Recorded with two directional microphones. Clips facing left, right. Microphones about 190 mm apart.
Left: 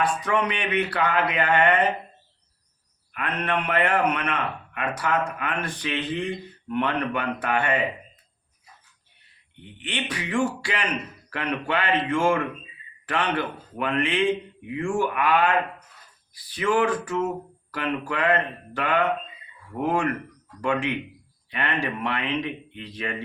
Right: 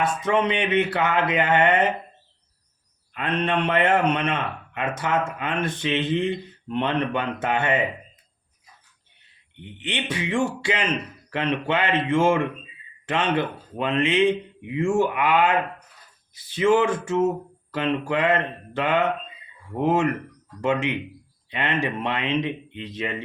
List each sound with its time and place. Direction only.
0.0 s speech: 25° right (ahead or behind)
3.1 s speech: 25° right (ahead or behind)
9.6 s speech: 20° right (ahead or behind)